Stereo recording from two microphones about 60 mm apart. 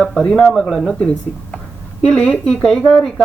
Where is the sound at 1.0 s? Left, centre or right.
Centre.